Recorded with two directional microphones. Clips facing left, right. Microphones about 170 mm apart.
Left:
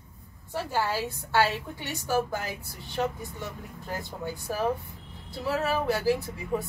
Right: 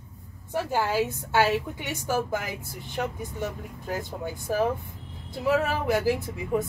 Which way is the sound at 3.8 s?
20° right (ahead or behind).